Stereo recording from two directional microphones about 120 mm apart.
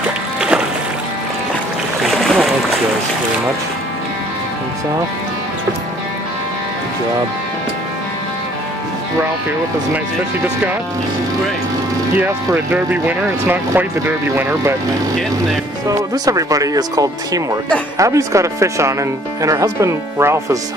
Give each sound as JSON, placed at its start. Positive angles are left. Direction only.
{"t": 0.0, "sound": "music", "side_deg": -5}
{"t": 2.0, "sound": "boat", "side_deg": 0}
{"t": 12.4, "sound": "speech", "side_deg": -15}
{"t": 15.9, "sound": "speech", "side_deg": -30}